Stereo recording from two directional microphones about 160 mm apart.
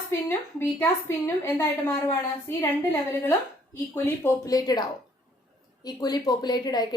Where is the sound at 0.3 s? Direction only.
15° left (ahead or behind).